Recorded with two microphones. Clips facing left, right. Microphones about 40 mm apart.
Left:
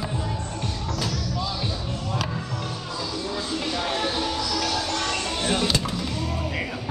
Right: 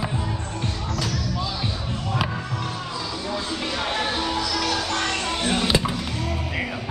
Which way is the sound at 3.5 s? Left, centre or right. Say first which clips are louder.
Left 1 dB; right.